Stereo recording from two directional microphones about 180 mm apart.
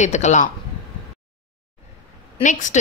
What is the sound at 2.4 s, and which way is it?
Speech, 45° left (ahead or behind).